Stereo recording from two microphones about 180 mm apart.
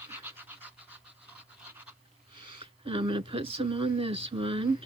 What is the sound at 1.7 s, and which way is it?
Pant, 10° right (ahead or behind).